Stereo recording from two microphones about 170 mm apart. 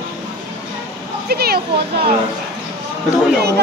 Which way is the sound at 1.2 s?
65° right (ahead or behind).